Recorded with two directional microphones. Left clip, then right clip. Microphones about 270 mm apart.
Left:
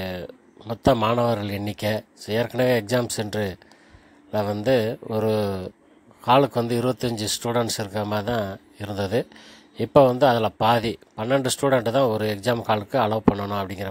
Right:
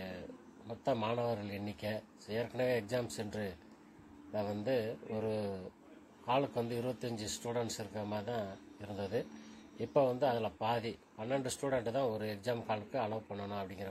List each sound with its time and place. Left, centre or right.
0.7 s speech: left